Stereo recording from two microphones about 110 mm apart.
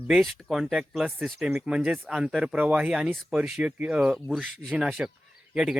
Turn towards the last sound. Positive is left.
turn(degrees=-5)  # may be behind; listen again after turning